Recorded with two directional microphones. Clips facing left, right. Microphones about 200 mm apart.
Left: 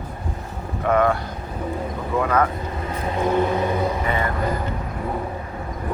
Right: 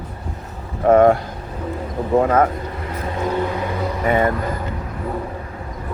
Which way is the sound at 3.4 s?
20° left (ahead or behind).